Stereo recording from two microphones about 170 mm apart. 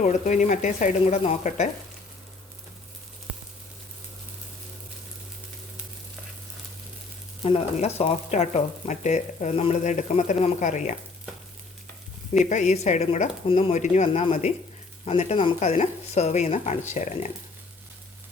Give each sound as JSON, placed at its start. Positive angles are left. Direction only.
{"t": 0.0, "sound": "speech", "side_deg": 45}
{"t": 7.4, "sound": "speech", "side_deg": 35}
{"t": 12.5, "sound": "speech", "side_deg": 45}